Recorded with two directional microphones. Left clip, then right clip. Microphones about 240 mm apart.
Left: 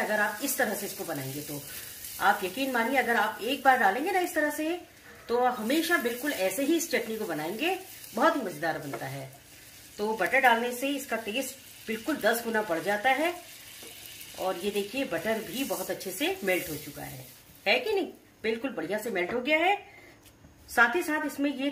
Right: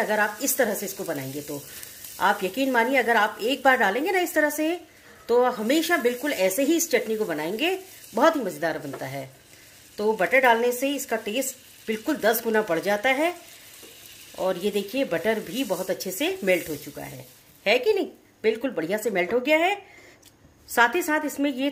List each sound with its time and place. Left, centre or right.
0.1 s speech: right
2.1 s speech: right
14.4 s speech: right
20.7 s speech: right